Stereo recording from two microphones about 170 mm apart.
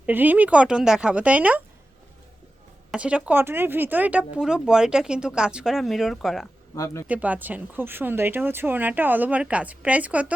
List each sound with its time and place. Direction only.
0.0 s speech: 10° right (ahead or behind)
2.9 s speech: 5° right (ahead or behind)
6.7 s speech: 20° left (ahead or behind)
7.1 s speech: 10° right (ahead or behind)